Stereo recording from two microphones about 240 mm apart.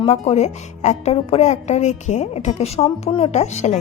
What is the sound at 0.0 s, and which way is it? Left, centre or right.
A woman's voice, left.